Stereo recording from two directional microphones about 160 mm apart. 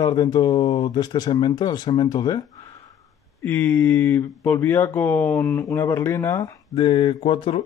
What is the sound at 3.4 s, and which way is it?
Speech, 10° left (ahead or behind).